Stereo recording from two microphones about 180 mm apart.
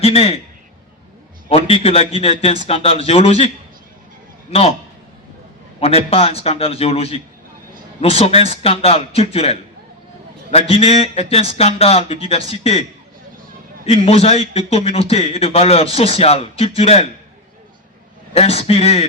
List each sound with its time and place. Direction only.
0.0 s a man's voice: 35° left (ahead or behind)
1.5 s a man's voice: 30° left (ahead or behind)
5.8 s a man's voice: 35° left (ahead or behind)
13.8 s a man's voice: 35° left (ahead or behind)
18.3 s a man's voice: 35° left (ahead or behind)